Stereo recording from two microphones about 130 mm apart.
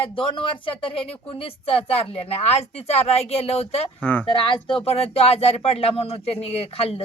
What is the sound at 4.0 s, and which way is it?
Speech, 10° left (ahead or behind).